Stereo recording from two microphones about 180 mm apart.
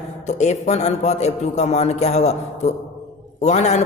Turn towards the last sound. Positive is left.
turn(degrees=40)  # may be behind; listen again after turning